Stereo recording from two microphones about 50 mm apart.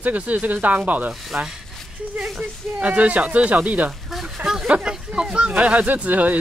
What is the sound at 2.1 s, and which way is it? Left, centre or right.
Speech, centre.